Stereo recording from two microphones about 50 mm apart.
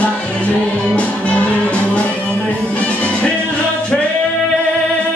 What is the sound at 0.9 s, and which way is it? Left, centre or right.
Music, left.